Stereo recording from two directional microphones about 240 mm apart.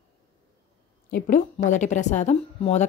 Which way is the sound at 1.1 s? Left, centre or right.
Left.